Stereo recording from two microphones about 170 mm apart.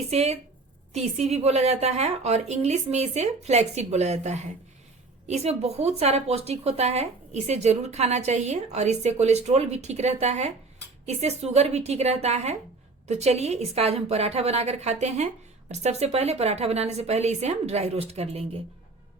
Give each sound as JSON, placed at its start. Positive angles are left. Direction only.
{"t": 0.1, "sound": "speech", "side_deg": -40}